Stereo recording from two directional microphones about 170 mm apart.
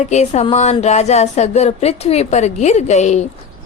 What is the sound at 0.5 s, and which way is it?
Speech, 40° left (ahead or behind).